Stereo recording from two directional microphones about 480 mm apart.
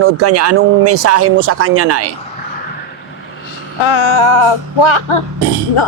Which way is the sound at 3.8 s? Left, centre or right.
Left.